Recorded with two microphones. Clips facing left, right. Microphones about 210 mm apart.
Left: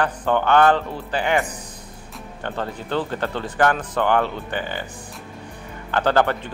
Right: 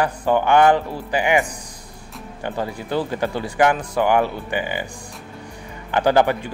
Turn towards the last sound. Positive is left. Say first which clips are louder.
# right 2 dB
turn(degrees=-10)  # may be behind; listen again after turning